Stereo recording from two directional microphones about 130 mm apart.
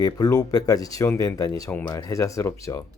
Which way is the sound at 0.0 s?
30° left (ahead or behind).